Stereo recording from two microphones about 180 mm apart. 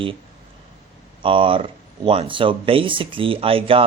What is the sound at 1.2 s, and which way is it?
Speech, 30° right (ahead or behind).